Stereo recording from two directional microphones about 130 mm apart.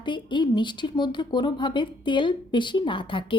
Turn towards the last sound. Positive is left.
turn(degrees=40)  # may be behind; listen again after turning